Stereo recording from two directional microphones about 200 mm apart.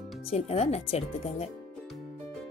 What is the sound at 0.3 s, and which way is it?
Speech, 30° left (ahead or behind).